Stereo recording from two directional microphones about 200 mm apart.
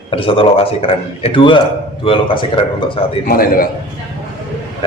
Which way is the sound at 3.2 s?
45° left (ahead or behind).